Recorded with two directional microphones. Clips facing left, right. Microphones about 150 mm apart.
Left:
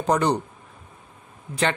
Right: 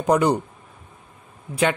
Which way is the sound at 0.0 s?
10° right (ahead or behind).